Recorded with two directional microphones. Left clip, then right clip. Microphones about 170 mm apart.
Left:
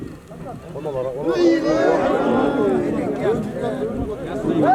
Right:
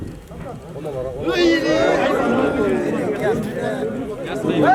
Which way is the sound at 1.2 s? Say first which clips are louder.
Right 1 dB; 20° right (ahead or behind).